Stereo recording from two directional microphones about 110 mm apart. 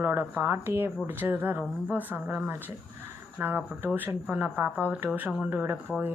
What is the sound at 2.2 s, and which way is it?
Speech, 5° right (ahead or behind).